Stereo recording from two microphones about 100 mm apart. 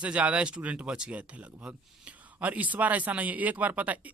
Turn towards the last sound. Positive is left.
turn(degrees=-15)  # may be behind; listen again after turning